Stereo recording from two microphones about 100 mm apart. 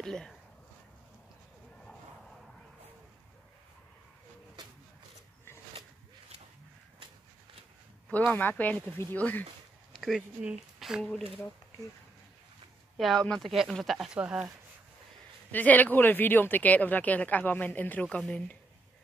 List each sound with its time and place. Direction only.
0.0 s a sound: 5° left (ahead or behind)
8.1 s speech: 20° left (ahead or behind)
9.9 s a sound: centre (ahead or behind)
10.4 s speech: 5° right (ahead or behind)
12.9 s speech: centre (ahead or behind)
15.5 s speech: 15° left (ahead or behind)